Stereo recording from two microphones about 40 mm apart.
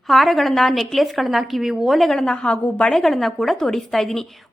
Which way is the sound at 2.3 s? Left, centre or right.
Left.